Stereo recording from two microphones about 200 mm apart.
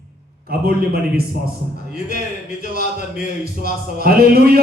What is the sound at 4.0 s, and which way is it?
Speech, 50° right (ahead or behind).